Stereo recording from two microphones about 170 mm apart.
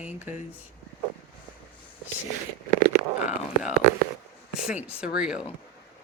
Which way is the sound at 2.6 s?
55° right (ahead or behind).